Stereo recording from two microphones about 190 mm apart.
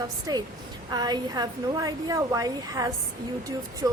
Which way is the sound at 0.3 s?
20° right (ahead or behind).